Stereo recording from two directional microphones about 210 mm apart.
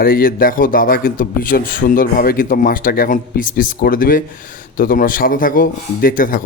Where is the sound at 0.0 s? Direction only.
45° left (ahead or behind).